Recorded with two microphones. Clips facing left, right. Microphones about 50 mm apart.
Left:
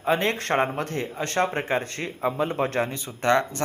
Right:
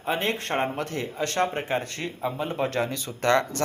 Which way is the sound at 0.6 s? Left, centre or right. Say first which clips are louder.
Left 2 dB; left.